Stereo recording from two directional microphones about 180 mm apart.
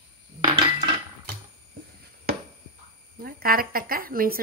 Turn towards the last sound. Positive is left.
turn(degrees=-55)  # may be behind; listen again after turning